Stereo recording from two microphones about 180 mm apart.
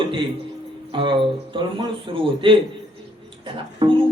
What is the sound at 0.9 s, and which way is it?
Speech, 30° right (ahead or behind).